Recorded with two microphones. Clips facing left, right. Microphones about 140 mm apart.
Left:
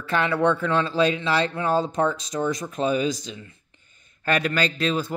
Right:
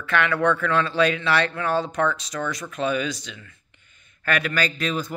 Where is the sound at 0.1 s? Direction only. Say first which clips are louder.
Even; 30° left (ahead or behind).